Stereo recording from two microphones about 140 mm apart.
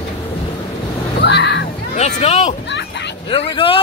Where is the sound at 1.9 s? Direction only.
50° left (ahead or behind).